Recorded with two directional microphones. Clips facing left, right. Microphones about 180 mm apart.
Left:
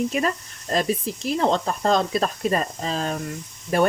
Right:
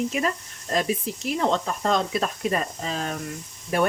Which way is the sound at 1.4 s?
35° left (ahead or behind).